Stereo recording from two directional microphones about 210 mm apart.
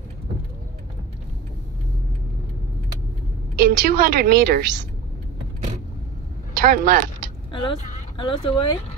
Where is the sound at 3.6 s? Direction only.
45° right (ahead or behind).